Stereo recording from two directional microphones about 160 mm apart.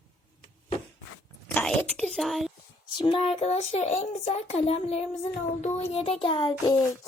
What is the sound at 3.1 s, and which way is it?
Speech, 35° left (ahead or behind).